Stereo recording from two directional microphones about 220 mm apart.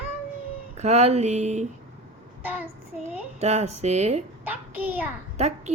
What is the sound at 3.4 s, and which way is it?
Speech, 30° right (ahead or behind).